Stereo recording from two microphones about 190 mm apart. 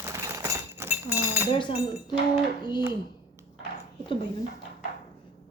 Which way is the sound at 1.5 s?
25° left (ahead or behind).